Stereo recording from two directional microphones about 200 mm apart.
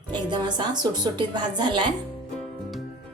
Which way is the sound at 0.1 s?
20° right (ahead or behind).